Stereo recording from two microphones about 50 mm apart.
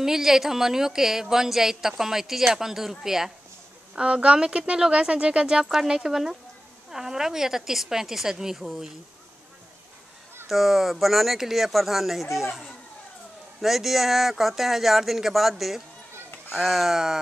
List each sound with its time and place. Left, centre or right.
0.0 s speech: centre
3.9 s speech: right
10.5 s speech: centre